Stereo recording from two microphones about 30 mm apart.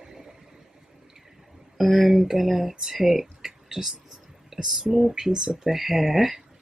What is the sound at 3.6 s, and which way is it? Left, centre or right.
Whispering, centre.